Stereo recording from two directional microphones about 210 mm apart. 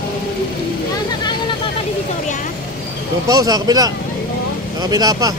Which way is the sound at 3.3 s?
20° right (ahead or behind).